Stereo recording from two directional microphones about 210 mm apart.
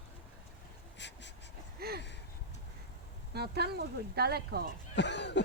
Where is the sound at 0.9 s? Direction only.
55° left (ahead or behind).